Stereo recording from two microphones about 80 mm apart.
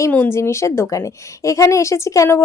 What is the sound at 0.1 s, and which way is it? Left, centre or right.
Speech, left.